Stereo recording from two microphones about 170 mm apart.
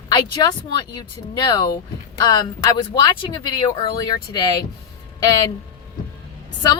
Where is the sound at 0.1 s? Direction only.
25° left (ahead or behind).